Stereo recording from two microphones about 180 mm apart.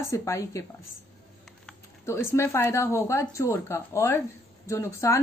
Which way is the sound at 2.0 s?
15° left (ahead or behind).